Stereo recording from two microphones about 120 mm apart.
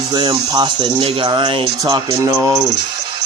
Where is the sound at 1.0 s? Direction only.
50° right (ahead or behind).